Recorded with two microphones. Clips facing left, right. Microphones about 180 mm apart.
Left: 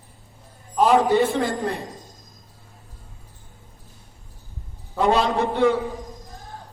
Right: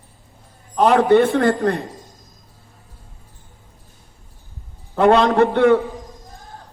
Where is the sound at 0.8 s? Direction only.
60° right (ahead or behind).